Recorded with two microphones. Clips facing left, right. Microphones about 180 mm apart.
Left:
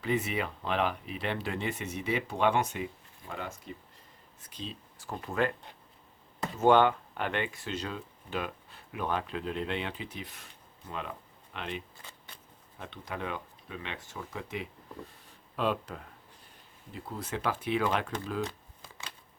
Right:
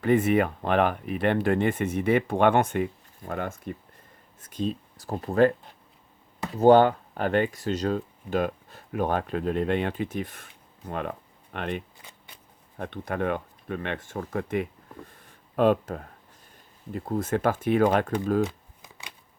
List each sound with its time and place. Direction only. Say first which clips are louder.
0.0 s speech: right 10 dB; 50° right (ahead or behind)
6.6 s speech: right 6 dB; 35° right (ahead or behind)
18.4 s shuffling cards: right 6 dB; 15° right (ahead or behind)